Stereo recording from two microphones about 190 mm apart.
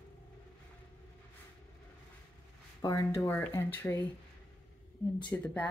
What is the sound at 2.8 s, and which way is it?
Speech, 15° left (ahead or behind).